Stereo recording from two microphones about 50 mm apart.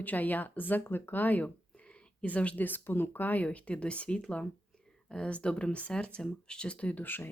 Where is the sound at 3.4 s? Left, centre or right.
Left.